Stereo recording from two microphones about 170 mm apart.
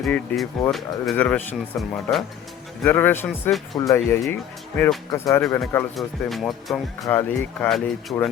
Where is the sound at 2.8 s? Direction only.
10° left (ahead or behind).